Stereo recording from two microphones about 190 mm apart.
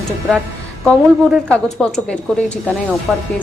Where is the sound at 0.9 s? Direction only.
Centre (ahead or behind).